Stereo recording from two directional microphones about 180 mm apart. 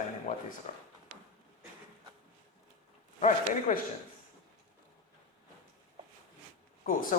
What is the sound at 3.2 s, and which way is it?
Speech, 45° left (ahead or behind).